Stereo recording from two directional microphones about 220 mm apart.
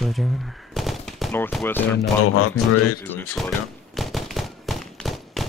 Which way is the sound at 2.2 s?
80° left.